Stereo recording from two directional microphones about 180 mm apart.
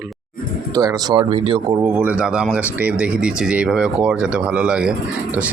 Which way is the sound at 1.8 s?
10° right (ahead or behind).